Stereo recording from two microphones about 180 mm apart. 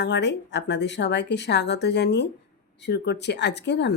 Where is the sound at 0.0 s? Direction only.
75° left (ahead or behind).